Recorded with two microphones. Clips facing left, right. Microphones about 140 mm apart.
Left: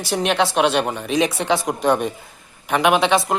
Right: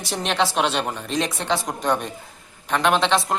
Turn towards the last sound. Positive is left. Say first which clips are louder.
# left 3 dB
turn(degrees=5)  # may be behind; listen again after turning